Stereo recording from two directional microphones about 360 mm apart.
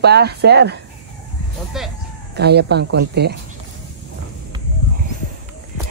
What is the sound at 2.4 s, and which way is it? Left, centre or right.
Speech, right.